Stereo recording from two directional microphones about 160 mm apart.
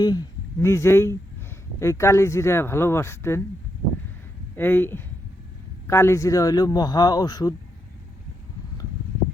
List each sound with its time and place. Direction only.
0.0 s speech: 25° left (ahead or behind)
4.5 s a man's voice: 15° left (ahead or behind)